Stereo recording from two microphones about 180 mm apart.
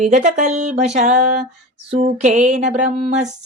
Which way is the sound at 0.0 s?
40° right (ahead or behind).